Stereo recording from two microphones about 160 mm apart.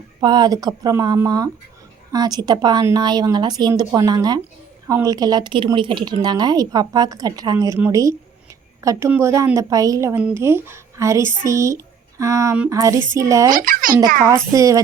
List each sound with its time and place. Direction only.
0.2 s a woman's voice: 25° right (ahead or behind)
13.5 s a child's voice: 60° right (ahead or behind)
14.3 s a woman's voice: 20° right (ahead or behind)